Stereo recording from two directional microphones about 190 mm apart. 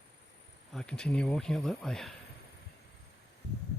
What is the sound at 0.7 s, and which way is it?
Speech, 5° left (ahead or behind).